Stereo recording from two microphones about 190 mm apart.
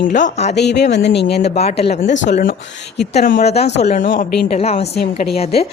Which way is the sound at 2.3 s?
50° left (ahead or behind).